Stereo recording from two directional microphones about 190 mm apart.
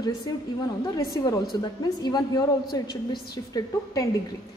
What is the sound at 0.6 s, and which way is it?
A woman's voice, 20° left (ahead or behind).